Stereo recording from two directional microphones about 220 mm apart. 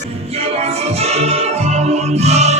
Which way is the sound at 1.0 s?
30° right (ahead or behind).